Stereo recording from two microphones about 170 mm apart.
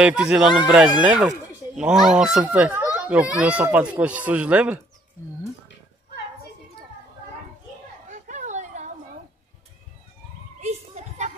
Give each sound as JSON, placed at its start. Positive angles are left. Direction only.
{"t": 0.0, "sound": "speech", "side_deg": -5}
{"t": 8.1, "sound": "a sound", "side_deg": -45}
{"t": 10.6, "sound": "children playing", "side_deg": -45}